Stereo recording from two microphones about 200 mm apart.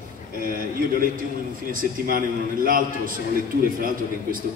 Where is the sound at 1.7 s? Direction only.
45° right (ahead or behind).